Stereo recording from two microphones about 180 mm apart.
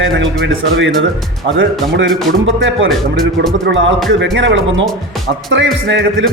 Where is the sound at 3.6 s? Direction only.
90° right.